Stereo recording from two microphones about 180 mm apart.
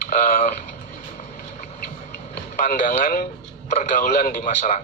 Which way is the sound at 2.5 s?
45° left (ahead or behind).